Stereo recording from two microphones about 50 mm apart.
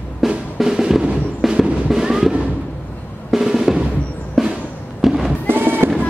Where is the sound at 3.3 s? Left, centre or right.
Centre.